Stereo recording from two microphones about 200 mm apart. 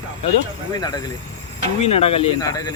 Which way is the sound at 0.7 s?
20° left (ahead or behind).